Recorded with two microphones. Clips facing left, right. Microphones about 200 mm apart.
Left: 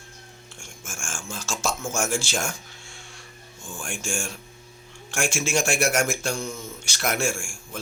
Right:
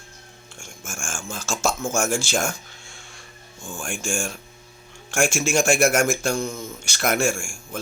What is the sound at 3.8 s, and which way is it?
Speech, 50° right (ahead or behind).